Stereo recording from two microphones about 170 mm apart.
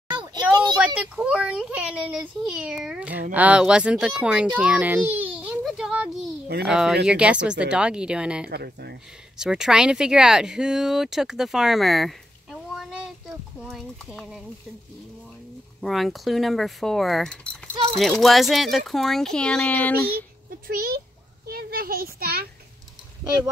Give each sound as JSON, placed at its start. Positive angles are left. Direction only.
{"t": 0.2, "sound": "a sound", "side_deg": -25}
{"t": 0.7, "sound": "speech", "side_deg": -5}
{"t": 8.5, "sound": "speech", "side_deg": -70}
{"t": 9.4, "sound": "speech", "side_deg": -5}
{"t": 15.8, "sound": "speech", "side_deg": 0}
{"t": 20.6, "sound": "a child's voice", "side_deg": -60}